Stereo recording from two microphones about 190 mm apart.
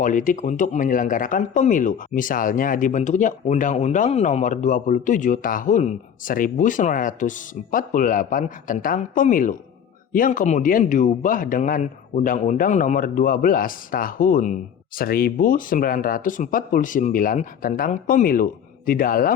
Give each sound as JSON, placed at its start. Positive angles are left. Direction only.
{"t": 0.0, "sound": "speech", "side_deg": 45}